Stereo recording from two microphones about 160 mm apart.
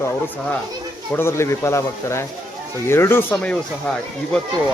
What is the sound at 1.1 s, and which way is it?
A child's voice, 15° left (ahead or behind).